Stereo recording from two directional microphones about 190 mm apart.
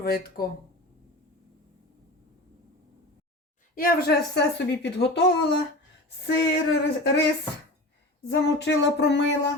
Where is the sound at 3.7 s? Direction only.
55° left (ahead or behind).